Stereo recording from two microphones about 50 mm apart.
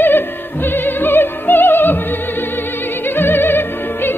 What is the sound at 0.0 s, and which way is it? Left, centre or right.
Opera, left.